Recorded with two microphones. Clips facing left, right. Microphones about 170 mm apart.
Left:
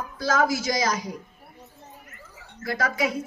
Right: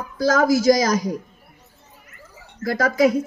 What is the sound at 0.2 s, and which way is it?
Speech, 40° right (ahead or behind).